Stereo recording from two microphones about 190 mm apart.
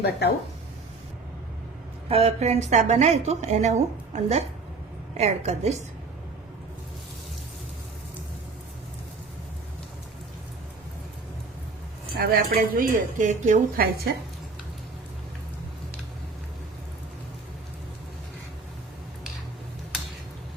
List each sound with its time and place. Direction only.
0.0 s speech: 60° left (ahead or behind)
2.0 s a woman's voice: 30° right (ahead or behind)
12.1 s a woman's voice: 55° right (ahead or behind)